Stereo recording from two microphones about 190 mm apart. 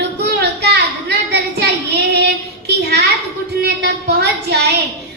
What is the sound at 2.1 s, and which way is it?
Child singing, 60° right (ahead or behind).